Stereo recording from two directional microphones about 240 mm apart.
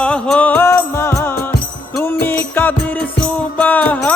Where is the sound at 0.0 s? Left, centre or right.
Centre.